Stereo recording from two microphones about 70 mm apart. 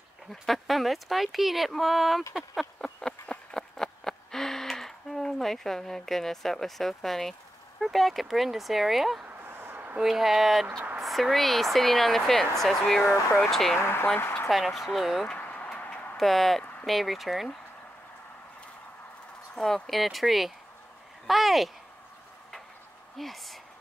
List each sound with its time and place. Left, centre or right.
0.3 s speech: centre
2.8 s a sound: centre
7.8 s speech: centre
9.4 s a sound: right
9.9 s speech: centre
13.0 s speech: left
13.4 s speech: centre
13.7 s speech: left
14.5 s speech: centre
15.3 s a sound: left
16.2 s speech: centre
19.5 s speech: centre
23.1 s speech: centre